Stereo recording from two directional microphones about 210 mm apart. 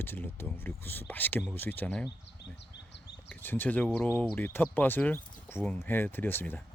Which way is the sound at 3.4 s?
10° left (ahead or behind).